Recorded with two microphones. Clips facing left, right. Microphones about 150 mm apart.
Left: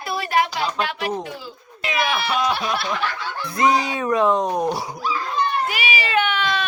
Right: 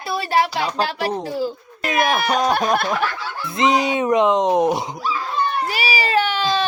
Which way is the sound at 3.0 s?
Centre (ahead or behind).